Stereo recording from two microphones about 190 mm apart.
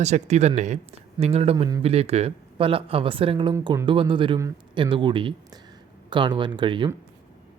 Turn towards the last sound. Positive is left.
turn(degrees=-25)  # may be behind; listen again after turning